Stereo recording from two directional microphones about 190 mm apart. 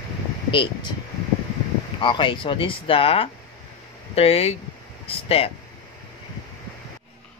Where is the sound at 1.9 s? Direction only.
25° left (ahead or behind).